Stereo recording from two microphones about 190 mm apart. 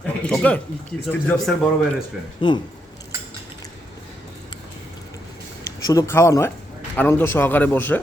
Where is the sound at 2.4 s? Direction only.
25° left (ahead or behind).